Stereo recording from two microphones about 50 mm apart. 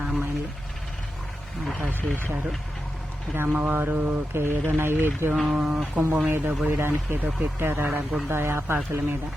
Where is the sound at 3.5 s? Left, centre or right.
Right.